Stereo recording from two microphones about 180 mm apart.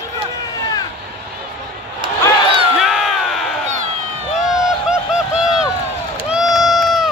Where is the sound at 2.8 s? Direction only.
Centre (ahead or behind).